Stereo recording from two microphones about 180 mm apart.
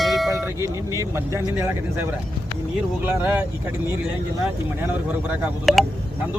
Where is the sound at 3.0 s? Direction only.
10° right (ahead or behind).